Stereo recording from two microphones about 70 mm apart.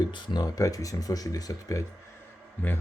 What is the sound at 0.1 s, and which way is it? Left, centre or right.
Speech, left.